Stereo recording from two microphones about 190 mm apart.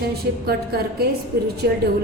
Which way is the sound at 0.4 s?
55° right (ahead or behind).